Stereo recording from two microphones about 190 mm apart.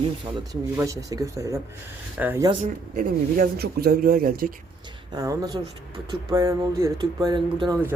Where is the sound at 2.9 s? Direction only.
50° right (ahead or behind).